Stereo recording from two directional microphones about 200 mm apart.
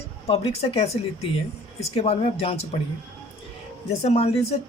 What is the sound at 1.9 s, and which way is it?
Speech, 30° left (ahead or behind).